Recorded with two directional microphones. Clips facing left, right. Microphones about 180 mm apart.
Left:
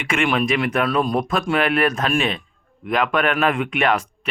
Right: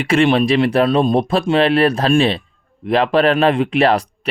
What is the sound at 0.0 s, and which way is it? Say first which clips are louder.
Speech: right 7 dB; 35° right (ahead or behind).